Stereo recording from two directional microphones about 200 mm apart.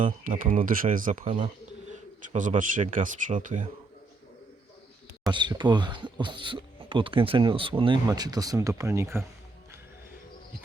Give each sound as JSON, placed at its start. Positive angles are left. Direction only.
{"t": 0.0, "sound": "speech", "side_deg": -40}
{"t": 2.3, "sound": "speech", "side_deg": -40}
{"t": 5.3, "sound": "speech", "side_deg": -20}